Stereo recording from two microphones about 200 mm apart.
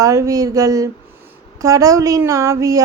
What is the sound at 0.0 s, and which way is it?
A woman's voice, 15° right (ahead or behind).